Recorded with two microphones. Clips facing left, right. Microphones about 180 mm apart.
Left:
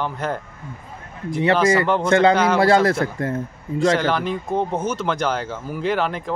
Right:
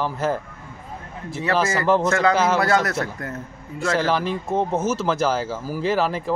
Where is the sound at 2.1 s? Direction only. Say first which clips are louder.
Left 3 dB; 30° left (ahead or behind).